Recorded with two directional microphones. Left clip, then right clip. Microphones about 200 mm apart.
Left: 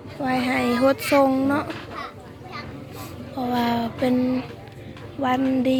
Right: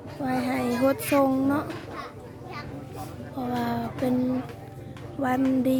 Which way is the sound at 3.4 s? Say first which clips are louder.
Left 6 dB; 5° right (ahead or behind).